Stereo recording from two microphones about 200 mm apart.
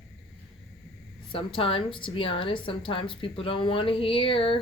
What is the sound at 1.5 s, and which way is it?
A woman's voice, 25° left (ahead or behind).